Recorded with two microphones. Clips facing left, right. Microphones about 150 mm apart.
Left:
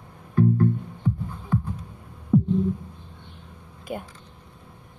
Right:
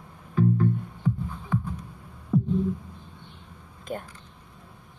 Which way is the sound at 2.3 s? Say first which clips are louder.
Left 5 dB; centre (ahead or behind).